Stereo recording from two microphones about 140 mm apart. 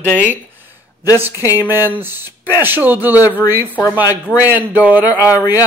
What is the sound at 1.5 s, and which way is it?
Speech, 15° right (ahead or behind).